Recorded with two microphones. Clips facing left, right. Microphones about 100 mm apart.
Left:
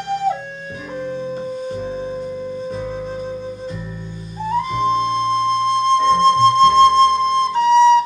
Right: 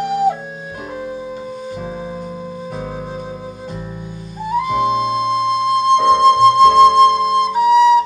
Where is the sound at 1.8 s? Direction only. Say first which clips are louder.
Left 2 dB; 55° right (ahead or behind).